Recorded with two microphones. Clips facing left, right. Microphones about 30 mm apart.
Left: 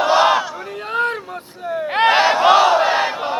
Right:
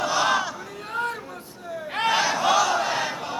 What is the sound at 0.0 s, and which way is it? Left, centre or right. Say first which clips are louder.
Battle cry: left 8 dB; left.